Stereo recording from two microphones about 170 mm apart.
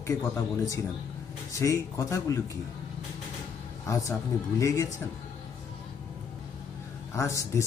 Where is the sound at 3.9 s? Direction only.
20° left (ahead or behind).